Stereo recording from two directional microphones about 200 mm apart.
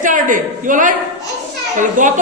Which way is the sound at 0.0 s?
40° right (ahead or behind).